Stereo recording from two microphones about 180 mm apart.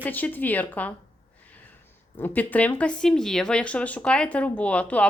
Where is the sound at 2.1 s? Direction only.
10° left (ahead or behind).